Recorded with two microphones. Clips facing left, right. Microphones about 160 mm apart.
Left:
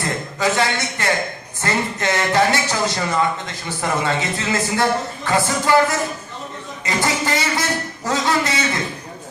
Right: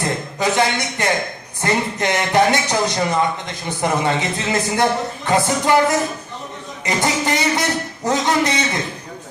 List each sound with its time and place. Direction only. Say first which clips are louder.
0.0 s a man's voice: right 1 dB; 20° right (ahead or behind)